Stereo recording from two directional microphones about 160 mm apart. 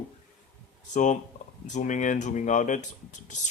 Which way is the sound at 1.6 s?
50° left (ahead or behind).